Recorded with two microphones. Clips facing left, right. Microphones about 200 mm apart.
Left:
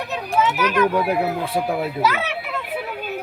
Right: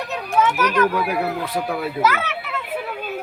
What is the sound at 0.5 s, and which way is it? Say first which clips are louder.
Speech: even; 5° left (ahead or behind).